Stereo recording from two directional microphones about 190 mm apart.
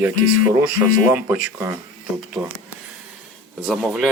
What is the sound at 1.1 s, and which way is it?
Speech, 10° right (ahead or behind).